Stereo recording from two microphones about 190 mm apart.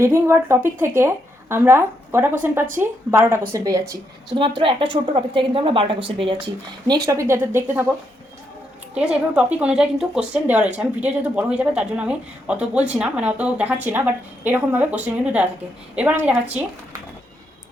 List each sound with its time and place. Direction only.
0.0 s a woman's voice: 15° right (ahead or behind)
9.0 s a woman's voice: 5° right (ahead or behind)